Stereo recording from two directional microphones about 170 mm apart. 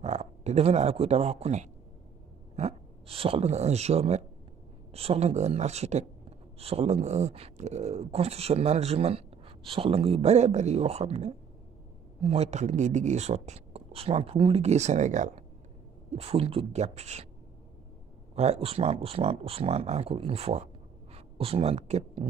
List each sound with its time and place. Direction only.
0.0 s speech: 40° right (ahead or behind)
18.3 s speech: 40° right (ahead or behind)